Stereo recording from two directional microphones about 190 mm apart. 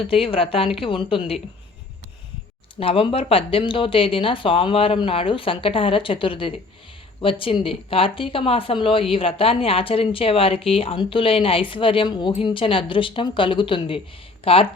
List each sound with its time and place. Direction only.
0.0 s speech: 30° left (ahead or behind)
2.8 s speech: 30° left (ahead or behind)